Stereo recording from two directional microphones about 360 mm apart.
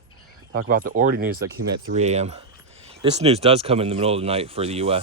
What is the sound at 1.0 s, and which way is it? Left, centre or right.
Speech, right.